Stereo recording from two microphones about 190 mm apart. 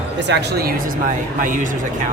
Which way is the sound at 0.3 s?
65° right (ahead or behind).